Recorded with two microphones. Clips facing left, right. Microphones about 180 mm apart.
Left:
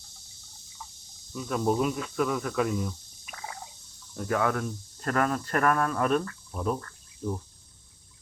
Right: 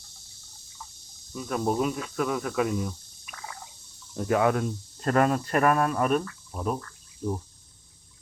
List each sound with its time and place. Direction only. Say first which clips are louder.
1.3 s speech: even; centre (ahead or behind)
3.2 s a sound: left 1 dB; 25° left (ahead or behind)
4.2 s speech: right 4 dB; 20° right (ahead or behind)